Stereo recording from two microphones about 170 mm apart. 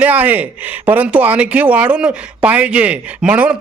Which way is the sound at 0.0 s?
10° right (ahead or behind).